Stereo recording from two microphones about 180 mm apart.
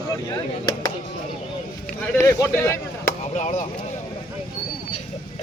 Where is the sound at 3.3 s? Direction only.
40° left (ahead or behind).